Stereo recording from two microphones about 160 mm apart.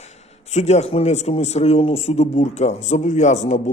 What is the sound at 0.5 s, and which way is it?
A man's voice, 45° left (ahead or behind).